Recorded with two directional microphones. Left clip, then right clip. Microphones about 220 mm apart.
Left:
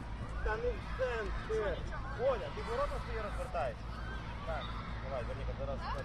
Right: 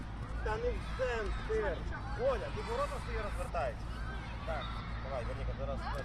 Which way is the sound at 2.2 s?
40° right (ahead or behind).